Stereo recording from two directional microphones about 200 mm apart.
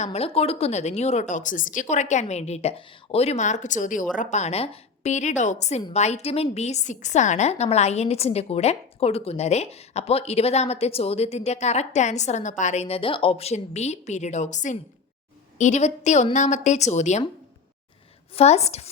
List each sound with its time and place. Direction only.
0.0 s a woman's voice: 30° left (ahead or behind)
18.3 s a woman's voice: 30° left (ahead or behind)